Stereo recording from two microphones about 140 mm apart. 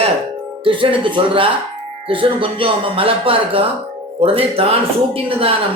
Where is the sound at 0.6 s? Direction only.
40° right (ahead or behind).